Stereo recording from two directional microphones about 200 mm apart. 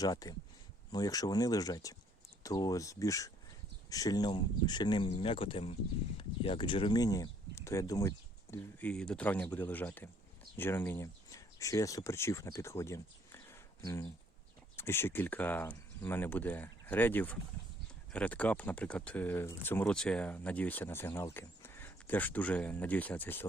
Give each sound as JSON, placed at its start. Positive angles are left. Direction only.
{"t": 0.0, "sound": "speech", "side_deg": 20}